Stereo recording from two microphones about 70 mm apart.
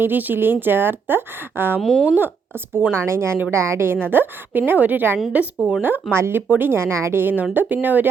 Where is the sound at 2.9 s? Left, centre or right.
Right.